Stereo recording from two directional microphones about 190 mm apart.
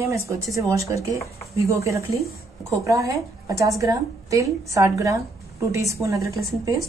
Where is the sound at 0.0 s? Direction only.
15° right (ahead or behind).